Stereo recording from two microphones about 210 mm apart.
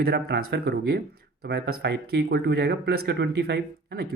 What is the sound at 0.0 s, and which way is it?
Speech, 45° right (ahead or behind).